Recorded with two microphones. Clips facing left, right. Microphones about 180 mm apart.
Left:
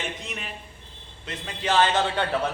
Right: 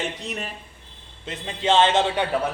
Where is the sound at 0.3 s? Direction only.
40° right (ahead or behind).